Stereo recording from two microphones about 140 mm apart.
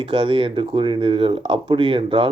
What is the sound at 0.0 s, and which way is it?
Speech, 35° right (ahead or behind).